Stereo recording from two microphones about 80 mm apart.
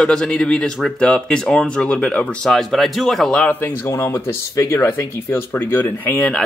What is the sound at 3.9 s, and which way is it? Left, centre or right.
Speech, left.